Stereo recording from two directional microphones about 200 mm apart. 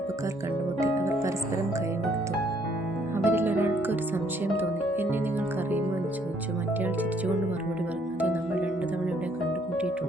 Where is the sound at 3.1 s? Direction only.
10° right (ahead or behind).